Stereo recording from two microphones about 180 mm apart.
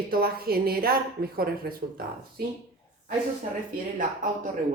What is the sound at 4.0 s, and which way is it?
Speech, 45° right (ahead or behind).